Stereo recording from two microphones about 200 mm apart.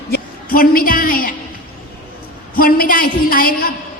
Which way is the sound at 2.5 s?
45° left (ahead or behind).